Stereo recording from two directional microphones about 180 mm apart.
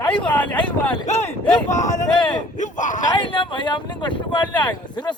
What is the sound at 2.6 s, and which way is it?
Speech, 45° left (ahead or behind).